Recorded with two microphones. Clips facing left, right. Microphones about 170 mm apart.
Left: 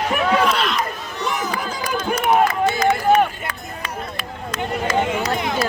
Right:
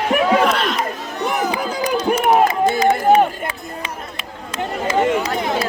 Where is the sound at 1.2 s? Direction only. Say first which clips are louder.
Right 4 dB; 60° right (ahead or behind).